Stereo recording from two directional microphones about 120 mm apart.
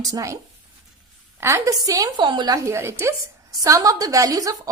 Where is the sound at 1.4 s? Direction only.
25° right (ahead or behind).